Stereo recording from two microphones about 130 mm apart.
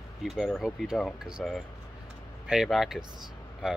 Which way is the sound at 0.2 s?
Centre (ahead or behind).